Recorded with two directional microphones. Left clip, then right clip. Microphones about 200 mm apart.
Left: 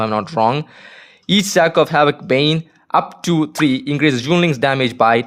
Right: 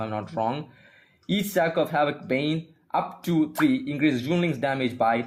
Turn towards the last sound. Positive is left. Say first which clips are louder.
# left 10 dB
turn(degrees=45)  # may be behind; listen again after turning